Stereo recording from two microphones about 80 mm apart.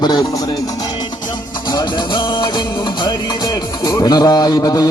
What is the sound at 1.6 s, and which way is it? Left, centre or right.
Music, left.